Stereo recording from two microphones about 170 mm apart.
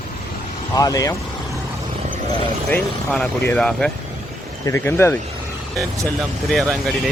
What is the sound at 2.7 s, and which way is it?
Speech, 5° left (ahead or behind).